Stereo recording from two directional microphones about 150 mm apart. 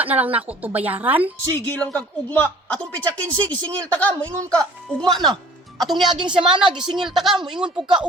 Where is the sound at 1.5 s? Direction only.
15° left (ahead or behind).